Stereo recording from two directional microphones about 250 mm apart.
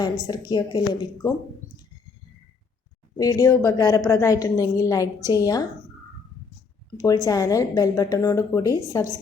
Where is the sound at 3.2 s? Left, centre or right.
Centre.